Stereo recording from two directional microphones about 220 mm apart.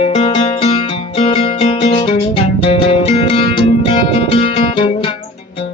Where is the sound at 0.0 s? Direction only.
25° left (ahead or behind).